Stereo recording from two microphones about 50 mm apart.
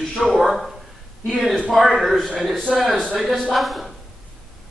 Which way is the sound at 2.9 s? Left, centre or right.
Centre.